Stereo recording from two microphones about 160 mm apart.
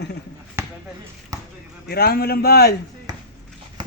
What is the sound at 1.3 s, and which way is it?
Basketball bounce, 20° right (ahead or behind).